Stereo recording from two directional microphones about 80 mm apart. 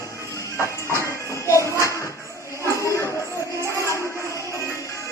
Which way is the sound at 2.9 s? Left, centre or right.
Left.